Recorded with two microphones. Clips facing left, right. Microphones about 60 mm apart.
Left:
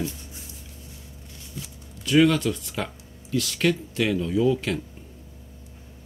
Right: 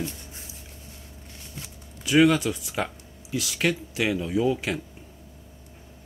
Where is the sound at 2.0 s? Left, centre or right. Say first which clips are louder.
Even; centre.